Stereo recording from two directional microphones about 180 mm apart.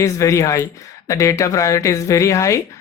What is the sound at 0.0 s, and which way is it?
Speech, 15° left (ahead or behind).